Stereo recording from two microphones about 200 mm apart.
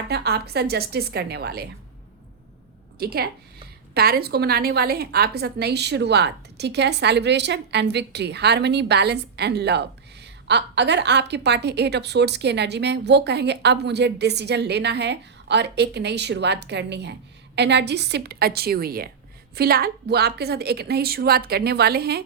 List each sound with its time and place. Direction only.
0.1 s a woman's voice: 55° right (ahead or behind)
3.0 s a woman's voice: 50° right (ahead or behind)